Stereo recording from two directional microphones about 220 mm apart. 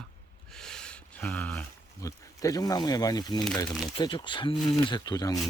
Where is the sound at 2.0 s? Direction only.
15° left (ahead or behind).